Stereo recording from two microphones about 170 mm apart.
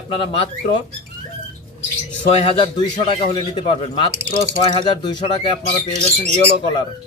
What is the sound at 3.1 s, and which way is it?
Speech, 30° left (ahead or behind).